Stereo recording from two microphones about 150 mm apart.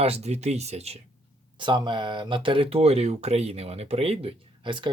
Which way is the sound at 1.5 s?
30° right (ahead or behind).